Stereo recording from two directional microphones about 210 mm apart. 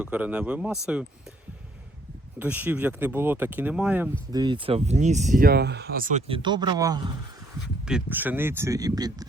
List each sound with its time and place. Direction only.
0.0 s speech: 5° right (ahead or behind)
2.4 s speech: 10° right (ahead or behind)
4.3 s speech: 20° right (ahead or behind); by 6.2 s 40° right (ahead or behind)
6.2 s speech: 25° right (ahead or behind)
7.9 s speech: 5° right (ahead or behind)